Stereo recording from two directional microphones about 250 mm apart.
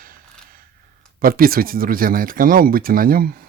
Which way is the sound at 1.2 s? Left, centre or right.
Right.